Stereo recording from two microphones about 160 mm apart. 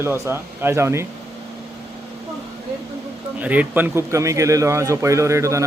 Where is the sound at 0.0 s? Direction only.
15° right (ahead or behind).